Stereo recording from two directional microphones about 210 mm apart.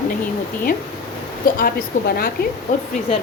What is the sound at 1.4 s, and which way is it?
Speech, 45° left (ahead or behind).